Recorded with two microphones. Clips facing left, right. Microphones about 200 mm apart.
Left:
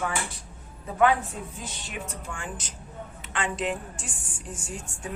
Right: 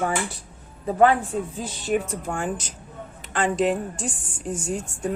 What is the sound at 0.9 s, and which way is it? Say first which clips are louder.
A woman's voice: right 4 dB; 35° right (ahead or behind).